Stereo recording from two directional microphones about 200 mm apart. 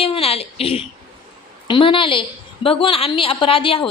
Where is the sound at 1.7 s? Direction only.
25° left (ahead or behind).